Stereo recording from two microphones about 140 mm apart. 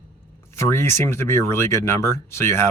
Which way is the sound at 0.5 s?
20° left (ahead or behind).